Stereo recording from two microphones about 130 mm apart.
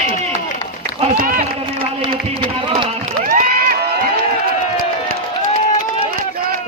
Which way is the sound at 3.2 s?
90° right.